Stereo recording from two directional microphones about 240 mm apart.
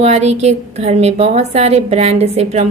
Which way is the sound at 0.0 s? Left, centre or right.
Right.